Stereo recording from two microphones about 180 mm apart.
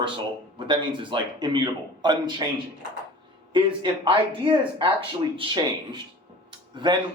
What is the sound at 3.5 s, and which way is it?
A man's voice, 30° right (ahead or behind).